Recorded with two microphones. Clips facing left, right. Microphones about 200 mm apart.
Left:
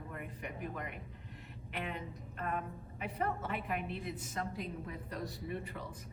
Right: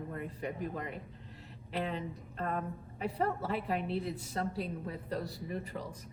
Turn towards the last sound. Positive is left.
turn(degrees=-35)  # may be behind; listen again after turning